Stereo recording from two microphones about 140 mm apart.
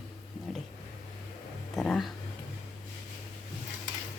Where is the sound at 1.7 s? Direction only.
5° left (ahead or behind).